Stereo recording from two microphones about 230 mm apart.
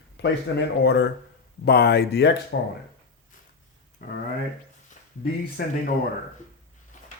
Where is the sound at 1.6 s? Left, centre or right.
Left.